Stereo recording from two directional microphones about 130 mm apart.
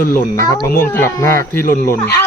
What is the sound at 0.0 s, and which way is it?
Speech, 90° left.